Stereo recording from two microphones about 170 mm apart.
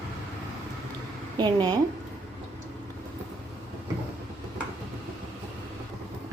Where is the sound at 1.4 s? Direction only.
25° right (ahead or behind).